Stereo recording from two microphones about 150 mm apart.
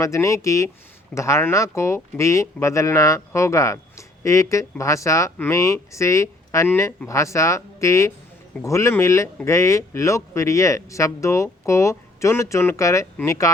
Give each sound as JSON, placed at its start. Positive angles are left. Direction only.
{"t": 0.0, "sound": "speech", "side_deg": 20}